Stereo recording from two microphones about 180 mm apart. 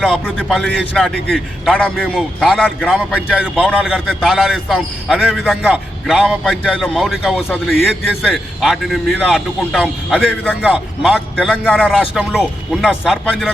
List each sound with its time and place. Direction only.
0.3 s a man's voice: centre (ahead or behind)
7.4 s a man's voice: 10° left (ahead or behind)
7.9 s a man's voice: centre (ahead or behind)
11.6 s a man's voice: 10° left (ahead or behind)
11.9 s a man's voice: 5° right (ahead or behind)